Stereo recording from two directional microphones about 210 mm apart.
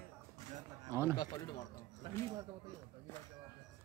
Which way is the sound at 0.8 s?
15° right (ahead or behind).